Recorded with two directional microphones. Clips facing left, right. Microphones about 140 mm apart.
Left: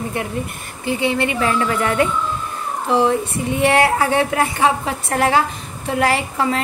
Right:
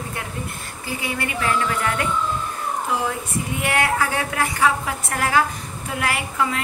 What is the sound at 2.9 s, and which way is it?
A woman's voice, 30° left (ahead or behind).